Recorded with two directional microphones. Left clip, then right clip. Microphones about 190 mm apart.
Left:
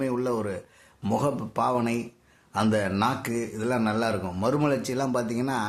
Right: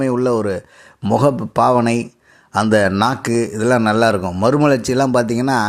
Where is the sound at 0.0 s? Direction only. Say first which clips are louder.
Right 11 dB; 40° right (ahead or behind).